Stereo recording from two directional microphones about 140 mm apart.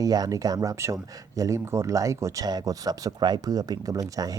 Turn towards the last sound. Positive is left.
turn(degrees=-25)  # may be behind; listen again after turning